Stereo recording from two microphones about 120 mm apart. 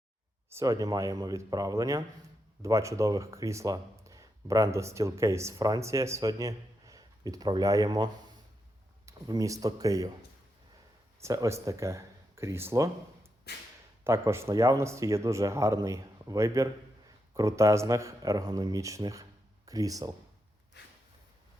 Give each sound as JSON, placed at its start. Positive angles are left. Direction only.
{"t": 0.5, "sound": "speech", "side_deg": -30}
{"t": 11.2, "sound": "speech", "side_deg": -25}
{"t": 14.0, "sound": "speech", "side_deg": -20}